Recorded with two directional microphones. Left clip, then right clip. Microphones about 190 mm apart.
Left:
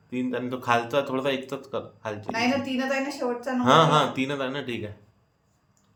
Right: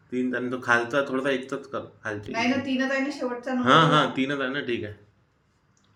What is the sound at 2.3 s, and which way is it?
A woman's voice, 40° left (ahead or behind).